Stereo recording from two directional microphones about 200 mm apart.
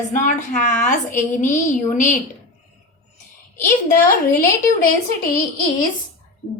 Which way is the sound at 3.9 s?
45° left (ahead or behind).